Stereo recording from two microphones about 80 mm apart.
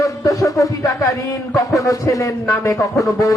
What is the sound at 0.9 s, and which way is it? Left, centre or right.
A man's voice, left.